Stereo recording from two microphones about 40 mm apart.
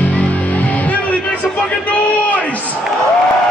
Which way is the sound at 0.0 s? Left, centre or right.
Left.